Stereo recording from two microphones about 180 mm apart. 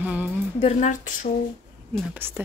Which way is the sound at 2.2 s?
10° right (ahead or behind).